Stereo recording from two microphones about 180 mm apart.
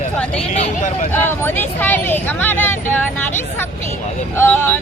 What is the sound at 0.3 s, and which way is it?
Speech, 35° left (ahead or behind).